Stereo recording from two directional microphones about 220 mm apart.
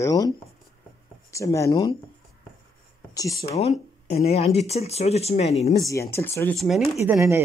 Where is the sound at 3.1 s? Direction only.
15° left (ahead or behind).